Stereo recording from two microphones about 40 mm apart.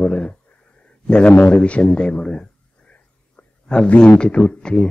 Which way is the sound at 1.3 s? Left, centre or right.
Left.